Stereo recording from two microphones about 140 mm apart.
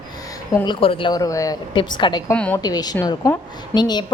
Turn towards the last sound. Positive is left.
turn(degrees=30)  # may be behind; listen again after turning